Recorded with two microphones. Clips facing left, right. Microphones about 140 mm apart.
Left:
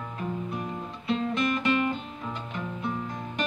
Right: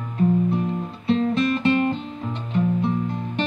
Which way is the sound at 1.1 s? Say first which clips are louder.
Right 7 dB; 30° right (ahead or behind).